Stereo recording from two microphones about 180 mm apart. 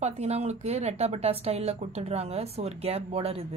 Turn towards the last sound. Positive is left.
turn(degrees=-35)  # may be behind; listen again after turning